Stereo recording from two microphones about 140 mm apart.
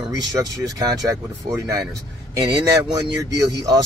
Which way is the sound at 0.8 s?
25° right (ahead or behind).